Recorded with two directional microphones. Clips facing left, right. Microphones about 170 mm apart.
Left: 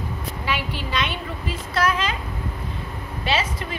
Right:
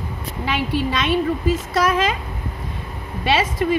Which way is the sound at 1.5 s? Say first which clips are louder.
Even; 45° right (ahead or behind).